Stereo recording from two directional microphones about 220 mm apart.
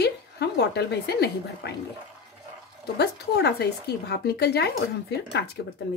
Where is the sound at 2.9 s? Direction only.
50° left (ahead or behind).